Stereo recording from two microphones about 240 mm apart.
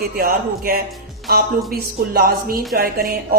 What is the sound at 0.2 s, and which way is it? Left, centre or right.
Speech, right.